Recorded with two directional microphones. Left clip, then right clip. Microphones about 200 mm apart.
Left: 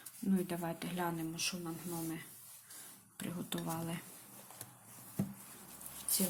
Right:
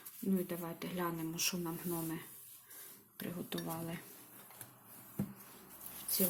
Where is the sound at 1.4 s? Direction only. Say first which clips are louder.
Right 2 dB; 15° right (ahead or behind).